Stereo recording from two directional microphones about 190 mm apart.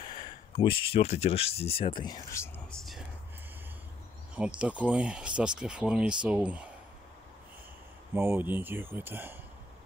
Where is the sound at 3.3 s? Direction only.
10° right (ahead or behind).